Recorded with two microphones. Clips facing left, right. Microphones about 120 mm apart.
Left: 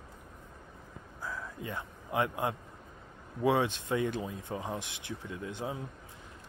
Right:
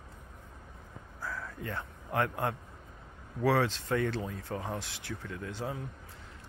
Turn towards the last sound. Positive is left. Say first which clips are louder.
# even
turn(degrees=20)  # may be behind; listen again after turning